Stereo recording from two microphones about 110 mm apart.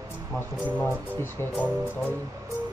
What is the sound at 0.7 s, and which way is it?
Speech, 15° left (ahead or behind).